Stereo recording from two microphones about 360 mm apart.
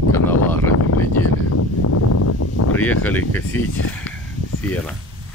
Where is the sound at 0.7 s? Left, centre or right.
Left.